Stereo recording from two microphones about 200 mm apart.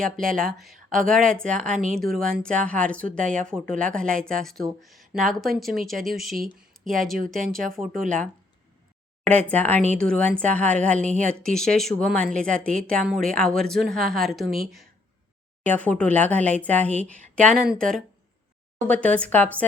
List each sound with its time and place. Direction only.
0.0 s a woman's voice: 5° left (ahead or behind)
1.7 s speech: 40° right (ahead or behind)
2.0 s a woman's voice: centre (ahead or behind)
7.8 s speech: 15° right (ahead or behind)
9.5 s a woman's voice: 10° left (ahead or behind)